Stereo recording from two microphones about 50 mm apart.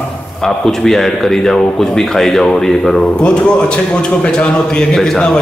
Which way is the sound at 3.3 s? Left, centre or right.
Left.